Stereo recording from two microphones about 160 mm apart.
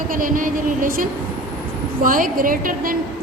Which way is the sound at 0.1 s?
60° right (ahead or behind).